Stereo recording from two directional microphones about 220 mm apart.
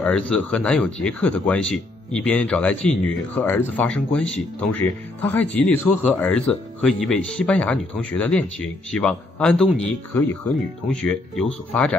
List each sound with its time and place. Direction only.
0.0 s speech: 5° left (ahead or behind)